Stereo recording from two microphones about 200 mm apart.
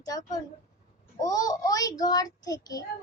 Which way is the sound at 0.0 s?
20° left (ahead or behind).